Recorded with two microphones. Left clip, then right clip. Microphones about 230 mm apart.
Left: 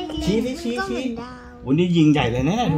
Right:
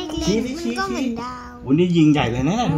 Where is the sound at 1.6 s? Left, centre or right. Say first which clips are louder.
Right 2 dB; left.